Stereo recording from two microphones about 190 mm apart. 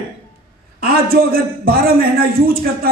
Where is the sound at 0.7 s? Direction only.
50° right (ahead or behind).